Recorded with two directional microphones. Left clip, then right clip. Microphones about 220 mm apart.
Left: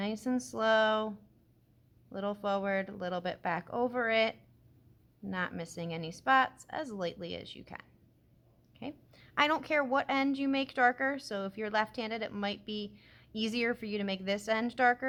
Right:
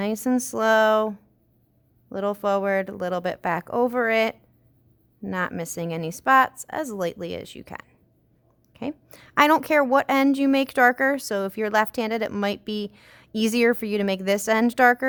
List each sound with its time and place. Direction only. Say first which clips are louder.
0.0 s a woman's voice: right 10 dB; 45° right (ahead or behind)